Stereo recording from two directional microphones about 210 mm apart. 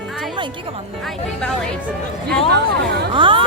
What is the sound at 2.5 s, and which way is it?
Speech, 50° right (ahead or behind).